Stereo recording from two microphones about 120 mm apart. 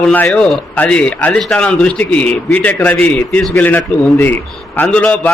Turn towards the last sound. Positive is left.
turn(degrees=10)  # may be behind; listen again after turning